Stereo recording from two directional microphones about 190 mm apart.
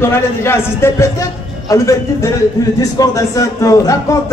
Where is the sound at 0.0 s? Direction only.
15° left (ahead or behind).